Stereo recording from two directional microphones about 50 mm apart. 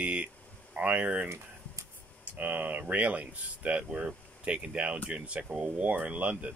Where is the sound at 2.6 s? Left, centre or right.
Right.